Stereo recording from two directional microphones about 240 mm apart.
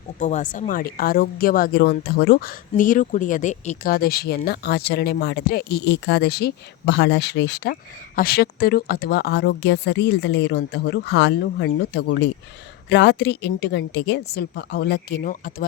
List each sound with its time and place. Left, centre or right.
0.2 s a woman's voice: left